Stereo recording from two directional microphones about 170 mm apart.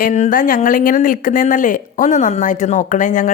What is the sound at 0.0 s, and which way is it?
Speech, 50° left (ahead or behind).